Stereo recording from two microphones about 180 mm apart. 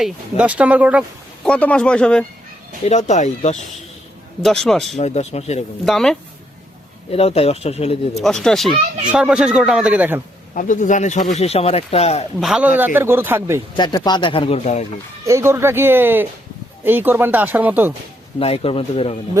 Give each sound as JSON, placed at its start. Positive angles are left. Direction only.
{"t": 0.0, "sound": "speech", "side_deg": -5}
{"t": 1.5, "sound": "a man's voice", "side_deg": 5}
{"t": 3.1, "sound": "speech", "side_deg": 40}
{"t": 4.4, "sound": "a man's voice", "side_deg": 0}
{"t": 4.9, "sound": "speech", "side_deg": 40}
{"t": 5.8, "sound": "a man's voice", "side_deg": 0}
{"t": 7.1, "sound": "speech", "side_deg": 35}
{"t": 8.2, "sound": "a man's voice", "side_deg": 5}
{"t": 10.5, "sound": "speech", "side_deg": 45}
{"t": 12.4, "sound": "speech", "side_deg": -5}
{"t": 13.7, "sound": "speech", "side_deg": 25}
{"t": 15.2, "sound": "speech", "side_deg": -15}
{"t": 18.3, "sound": "speech", "side_deg": 30}